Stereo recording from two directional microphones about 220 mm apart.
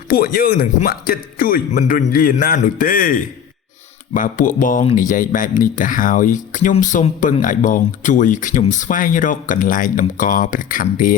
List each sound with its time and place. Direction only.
0.1 s speech: 40° left (ahead or behind)